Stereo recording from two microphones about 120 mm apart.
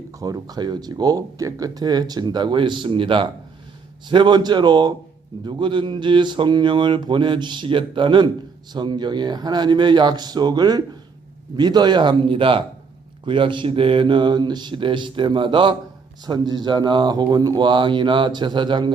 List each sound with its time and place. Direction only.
0.2 s speech: 30° right (ahead or behind)